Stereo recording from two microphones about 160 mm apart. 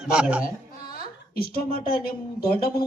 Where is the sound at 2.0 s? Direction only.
70° left (ahead or behind).